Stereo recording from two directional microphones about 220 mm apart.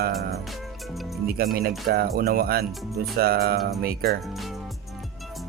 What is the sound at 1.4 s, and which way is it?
Speech, 45° right (ahead or behind).